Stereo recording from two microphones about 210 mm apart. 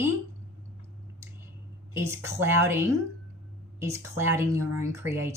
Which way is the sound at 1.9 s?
10° right (ahead or behind).